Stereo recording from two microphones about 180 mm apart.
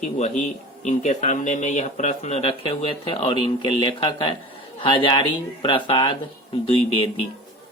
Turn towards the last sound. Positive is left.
turn(degrees=30)  # may be behind; listen again after turning